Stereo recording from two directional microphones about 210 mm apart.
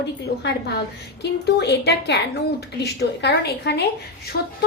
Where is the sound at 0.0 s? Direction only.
55° left (ahead or behind).